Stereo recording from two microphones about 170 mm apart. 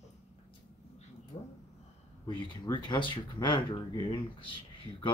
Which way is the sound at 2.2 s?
25° left (ahead or behind).